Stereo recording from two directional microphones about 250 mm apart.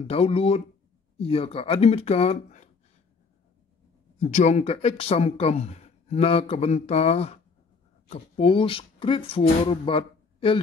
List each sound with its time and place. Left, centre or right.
0.0 s speech: left
4.2 s speech: left